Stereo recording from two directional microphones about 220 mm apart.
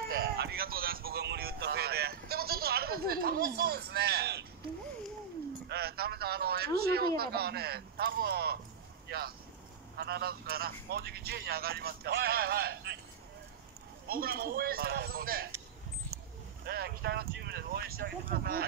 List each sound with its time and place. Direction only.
0.1 s a sound: 45° right (ahead or behind)
5.7 s a man's voice: 45° right (ahead or behind)
14.0 s a man's voice: 45° right (ahead or behind)
16.6 s a man's voice: 45° right (ahead or behind)